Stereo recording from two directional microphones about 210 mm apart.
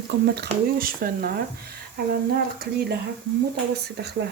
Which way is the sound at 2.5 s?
50° right (ahead or behind).